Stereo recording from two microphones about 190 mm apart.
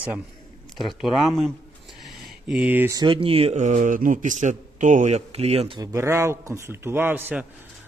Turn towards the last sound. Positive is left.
turn(degrees=-10)  # may be behind; listen again after turning